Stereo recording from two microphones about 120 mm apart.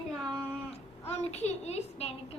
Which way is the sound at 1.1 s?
60° left (ahead or behind).